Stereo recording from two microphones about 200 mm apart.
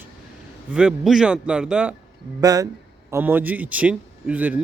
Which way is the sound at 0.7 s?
5° right (ahead or behind).